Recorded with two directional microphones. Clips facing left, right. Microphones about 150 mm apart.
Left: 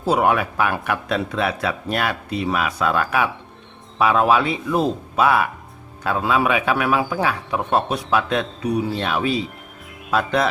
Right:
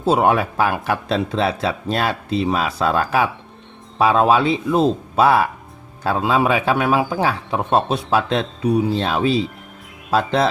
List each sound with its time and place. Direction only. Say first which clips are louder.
0.0 s speech: right 2 dB; 25° right (ahead or behind)